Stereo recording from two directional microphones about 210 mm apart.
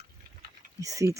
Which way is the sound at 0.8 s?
15° right (ahead or behind).